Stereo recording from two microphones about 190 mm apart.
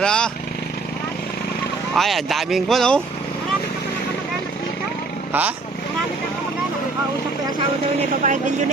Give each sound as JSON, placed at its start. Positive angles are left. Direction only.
{"t": 0.0, "sound": "speech", "side_deg": 5}
{"t": 2.0, "sound": "speech", "side_deg": 0}
{"t": 5.3, "sound": "speech", "side_deg": -10}
{"t": 8.2, "sound": "speech", "side_deg": -40}